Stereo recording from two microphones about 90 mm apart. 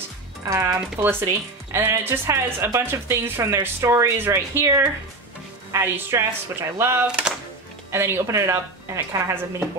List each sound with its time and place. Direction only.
0.7 s a woman's voice: 25° right (ahead or behind)
7.1 s speech: 10° right (ahead or behind)
7.9 s a woman's voice: 30° right (ahead or behind)